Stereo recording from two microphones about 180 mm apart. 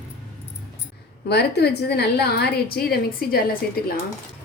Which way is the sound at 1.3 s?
65° left (ahead or behind).